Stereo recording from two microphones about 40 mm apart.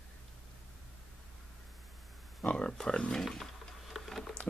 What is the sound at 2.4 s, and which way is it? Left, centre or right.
Speech, left.